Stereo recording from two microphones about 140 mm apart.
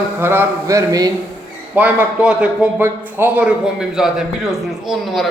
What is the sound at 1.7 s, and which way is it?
A man's voice, 10° right (ahead or behind).